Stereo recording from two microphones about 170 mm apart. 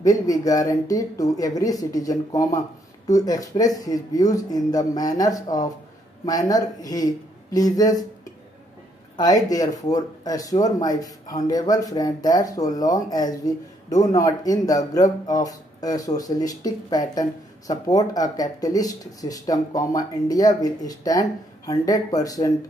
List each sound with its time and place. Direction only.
0.0 s speech: 20° left (ahead or behind)
9.1 s speech: 20° left (ahead or behind)